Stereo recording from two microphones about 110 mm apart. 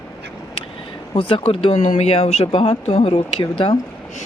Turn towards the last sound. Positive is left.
turn(degrees=55)  # may be behind; listen again after turning